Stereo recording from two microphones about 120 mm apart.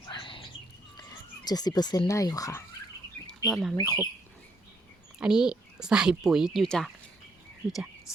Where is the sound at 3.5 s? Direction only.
Centre (ahead or behind).